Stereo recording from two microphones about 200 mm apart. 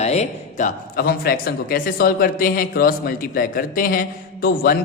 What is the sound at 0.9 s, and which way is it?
A man's voice, 50° left (ahead or behind).